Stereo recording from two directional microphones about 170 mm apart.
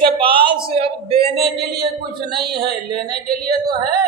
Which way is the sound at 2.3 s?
70° right (ahead or behind).